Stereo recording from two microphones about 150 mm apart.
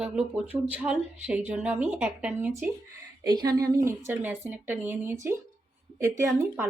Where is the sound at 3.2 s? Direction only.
25° right (ahead or behind).